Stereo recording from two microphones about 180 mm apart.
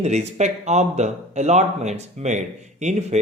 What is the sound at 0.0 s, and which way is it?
Speech, 40° right (ahead or behind).